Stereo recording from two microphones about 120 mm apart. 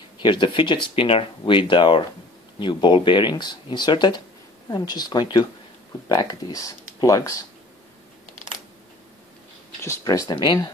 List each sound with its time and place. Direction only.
0.2 s speech: 40° left (ahead or behind)
7.0 s speech: 30° left (ahead or behind)
9.8 s speech: 25° left (ahead or behind)